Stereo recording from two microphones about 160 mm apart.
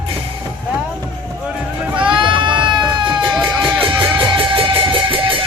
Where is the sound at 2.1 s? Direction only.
30° right (ahead or behind).